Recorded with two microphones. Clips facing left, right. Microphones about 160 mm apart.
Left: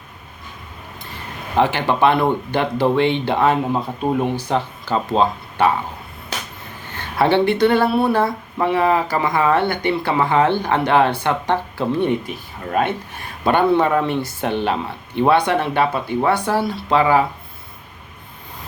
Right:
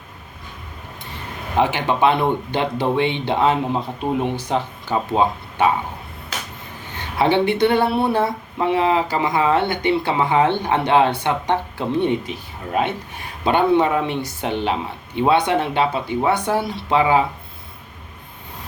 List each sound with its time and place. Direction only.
1.5 s speech: 15° right (ahead or behind)
6.9 s speech: 15° right (ahead or behind)